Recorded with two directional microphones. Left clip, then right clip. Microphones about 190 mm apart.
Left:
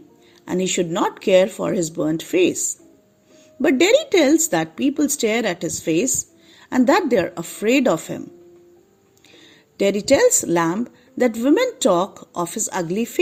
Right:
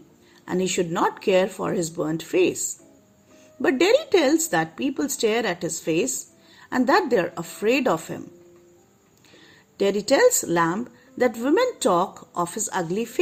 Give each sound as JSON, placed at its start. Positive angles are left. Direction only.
{"t": 0.4, "sound": "a woman's voice", "side_deg": 30}
{"t": 3.6, "sound": "a woman's voice", "side_deg": 30}
{"t": 9.8, "sound": "a woman's voice", "side_deg": 30}